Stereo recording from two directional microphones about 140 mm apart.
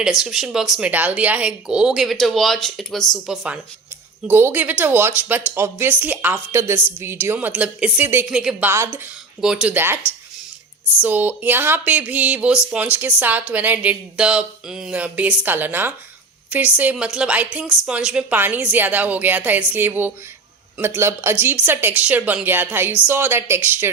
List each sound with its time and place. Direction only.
0.0 s speech: 5° right (ahead or behind)
4.3 s a woman's voice: 15° right (ahead or behind)
8.7 s speech: 20° right (ahead or behind)
9.4 s a woman's voice: 5° right (ahead or behind)
11.0 s a woman's voice: 10° right (ahead or behind)